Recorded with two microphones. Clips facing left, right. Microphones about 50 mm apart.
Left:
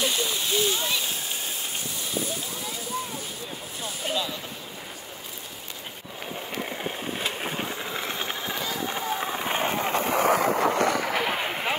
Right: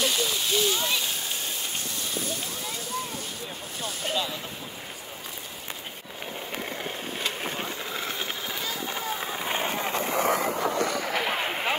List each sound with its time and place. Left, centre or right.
0.0 s a sound: centre
3.8 s a sound: centre
6.6 s vehicle: centre
8.1 s run: left
10.4 s vehicle: left
10.9 s artillery fire: centre
11.1 s artillery fire: centre